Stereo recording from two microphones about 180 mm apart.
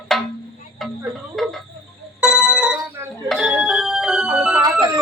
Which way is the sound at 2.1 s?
5° right (ahead or behind).